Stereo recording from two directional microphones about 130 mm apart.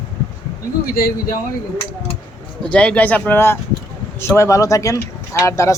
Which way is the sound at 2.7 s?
10° left (ahead or behind).